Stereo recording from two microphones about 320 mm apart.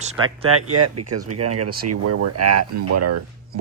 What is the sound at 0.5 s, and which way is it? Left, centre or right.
Speech, right.